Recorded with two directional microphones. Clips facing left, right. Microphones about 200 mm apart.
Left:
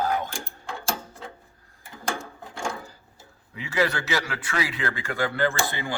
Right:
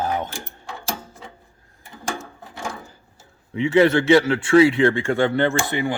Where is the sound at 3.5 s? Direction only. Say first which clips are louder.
Right 10 dB; 25° right (ahead or behind).